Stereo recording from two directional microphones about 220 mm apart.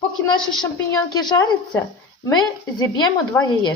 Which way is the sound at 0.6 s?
20° left (ahead or behind).